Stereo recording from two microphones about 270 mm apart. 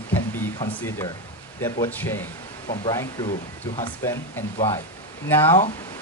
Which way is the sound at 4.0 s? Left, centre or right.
Centre.